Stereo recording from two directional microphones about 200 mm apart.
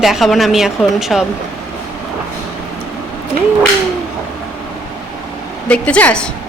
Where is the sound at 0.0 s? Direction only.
Centre (ahead or behind).